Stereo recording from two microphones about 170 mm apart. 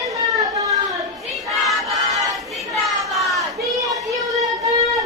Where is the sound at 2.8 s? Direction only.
Centre (ahead or behind).